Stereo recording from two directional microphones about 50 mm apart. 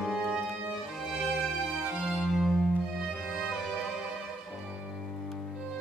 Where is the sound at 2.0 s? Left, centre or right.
Centre.